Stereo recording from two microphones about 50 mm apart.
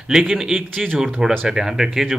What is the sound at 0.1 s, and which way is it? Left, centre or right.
Speech, centre.